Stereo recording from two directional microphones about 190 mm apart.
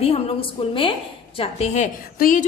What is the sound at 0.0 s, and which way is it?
A woman's voice, 30° left (ahead or behind).